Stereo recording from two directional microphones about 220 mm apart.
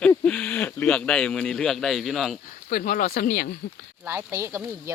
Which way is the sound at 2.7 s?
35° left (ahead or behind).